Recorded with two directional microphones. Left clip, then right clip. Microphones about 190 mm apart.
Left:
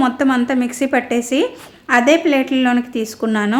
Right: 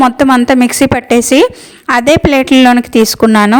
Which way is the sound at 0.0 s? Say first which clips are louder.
Right 9 dB; 45° right (ahead or behind).